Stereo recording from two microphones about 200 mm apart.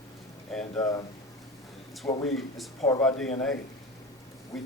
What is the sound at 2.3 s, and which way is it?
Speech, centre (ahead or behind).